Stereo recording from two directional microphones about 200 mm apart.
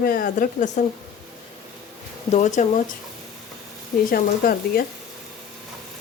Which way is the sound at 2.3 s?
35° left (ahead or behind).